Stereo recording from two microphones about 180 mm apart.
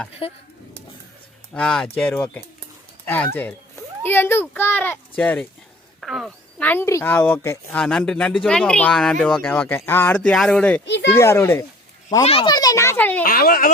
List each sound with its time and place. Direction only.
1.5 s a child's voice: 5° left (ahead or behind)
6.0 s a sound: centre (ahead or behind)
6.7 s a child's voice: 15° left (ahead or behind)
7.8 s speech: 5° left (ahead or behind)
10.8 s a child's voice: 75° left (ahead or behind)
11.1 s a child's voice: 15° left (ahead or behind)
12.2 s a child's voice: 35° left (ahead or behind)
12.5 s a child's voice: 20° left (ahead or behind)
13.2 s speech: 55° left (ahead or behind)